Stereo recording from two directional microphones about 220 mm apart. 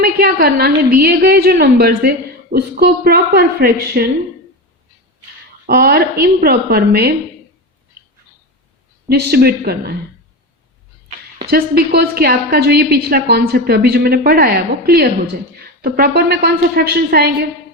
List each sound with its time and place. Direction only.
0.0 s a woman's voice: 45° right (ahead or behind)
5.6 s a woman's voice: 45° right (ahead or behind)
9.0 s a woman's voice: 45° right (ahead or behind)
11.3 s a woman's voice: 45° right (ahead or behind)